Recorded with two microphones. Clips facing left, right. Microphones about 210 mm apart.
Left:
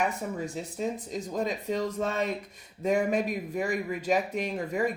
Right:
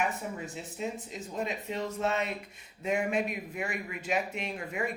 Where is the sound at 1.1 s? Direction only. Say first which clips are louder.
Left 4 dB; 40° left (ahead or behind).